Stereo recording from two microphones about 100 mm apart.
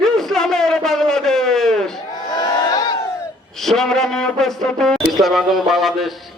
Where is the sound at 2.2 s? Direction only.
45° left (ahead or behind).